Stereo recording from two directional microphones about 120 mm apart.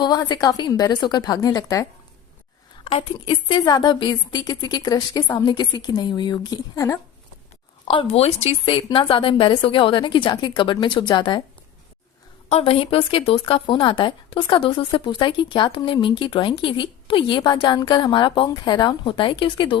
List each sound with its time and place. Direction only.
0.0 s a woman's voice: 35° left (ahead or behind)
2.8 s a woman's voice: 45° left (ahead or behind); by 7.0 s 25° left (ahead or behind)
7.9 s a woman's voice: 50° left (ahead or behind)
12.5 s speech: 55° left (ahead or behind)